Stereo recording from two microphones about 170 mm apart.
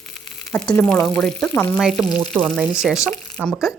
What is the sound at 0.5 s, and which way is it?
Speech, 10° left (ahead or behind).